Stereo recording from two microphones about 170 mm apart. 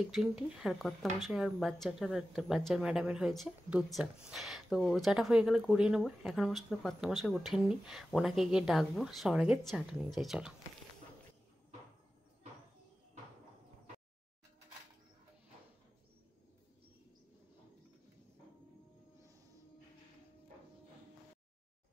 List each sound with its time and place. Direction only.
0.0 s speech: 5° right (ahead or behind)